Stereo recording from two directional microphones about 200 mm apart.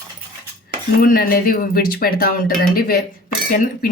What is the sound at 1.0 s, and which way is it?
Speech, 45° left (ahead or behind).